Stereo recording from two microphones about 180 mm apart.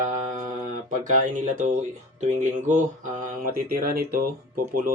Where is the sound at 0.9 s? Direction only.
45° right (ahead or behind).